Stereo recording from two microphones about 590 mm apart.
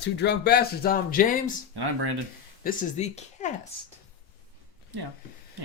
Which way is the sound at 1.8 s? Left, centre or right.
Right.